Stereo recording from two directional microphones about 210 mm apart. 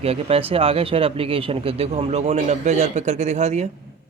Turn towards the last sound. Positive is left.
turn(degrees=-35)  # may be behind; listen again after turning